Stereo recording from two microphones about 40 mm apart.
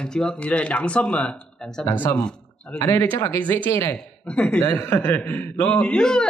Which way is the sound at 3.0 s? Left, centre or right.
Left.